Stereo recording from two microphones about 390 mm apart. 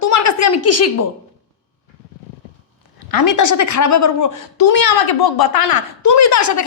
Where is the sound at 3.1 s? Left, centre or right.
Left.